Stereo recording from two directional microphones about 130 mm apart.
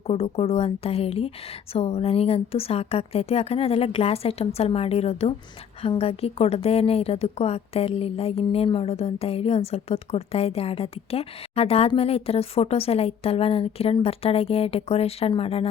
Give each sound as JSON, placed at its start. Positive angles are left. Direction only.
{"t": 0.1, "sound": "a woman's voice", "side_deg": 50}